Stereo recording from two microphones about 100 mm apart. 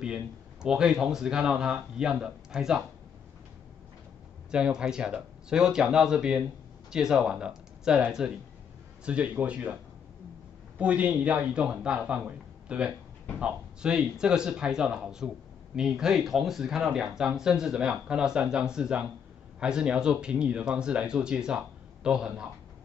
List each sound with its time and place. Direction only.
0.0 s speech: 10° right (ahead or behind)
4.5 s speech: 10° right (ahead or behind)
10.8 s speech: 15° right (ahead or behind)